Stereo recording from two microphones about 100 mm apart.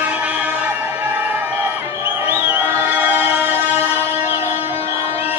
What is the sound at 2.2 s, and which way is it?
Music, 20° right (ahead or behind).